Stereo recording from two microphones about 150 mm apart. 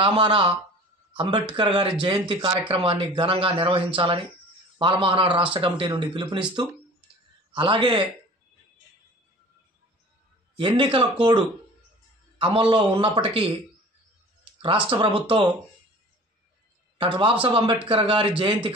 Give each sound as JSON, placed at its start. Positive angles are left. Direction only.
{"t": 0.0, "sound": "speech", "side_deg": -35}
{"t": 7.5, "sound": "speech", "side_deg": -35}
{"t": 10.8, "sound": "speech", "side_deg": -35}
{"t": 14.9, "sound": "speech", "side_deg": -35}
{"t": 17.0, "sound": "speech", "side_deg": -35}